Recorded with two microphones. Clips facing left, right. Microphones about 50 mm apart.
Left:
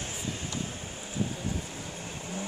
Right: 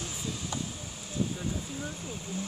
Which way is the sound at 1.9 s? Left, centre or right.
Left.